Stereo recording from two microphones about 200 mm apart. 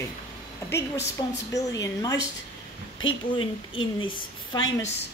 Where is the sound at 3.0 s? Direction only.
70° left (ahead or behind).